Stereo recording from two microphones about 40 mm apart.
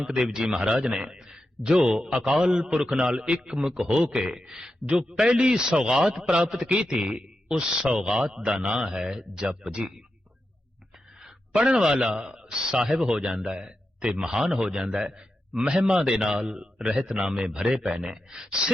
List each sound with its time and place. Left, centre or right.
0.0 s a man's voice: centre
11.2 s a man's voice: centre